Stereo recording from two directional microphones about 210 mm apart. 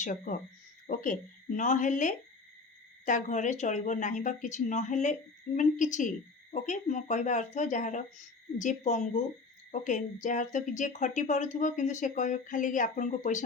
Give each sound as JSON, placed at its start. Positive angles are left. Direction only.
{"t": 0.0, "sound": "a woman's voice", "side_deg": 35}